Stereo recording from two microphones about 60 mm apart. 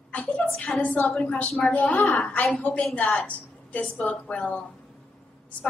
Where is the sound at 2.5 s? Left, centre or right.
Centre.